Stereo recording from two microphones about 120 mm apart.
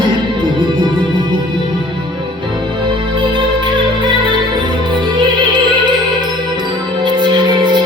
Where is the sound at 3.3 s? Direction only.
40° right (ahead or behind).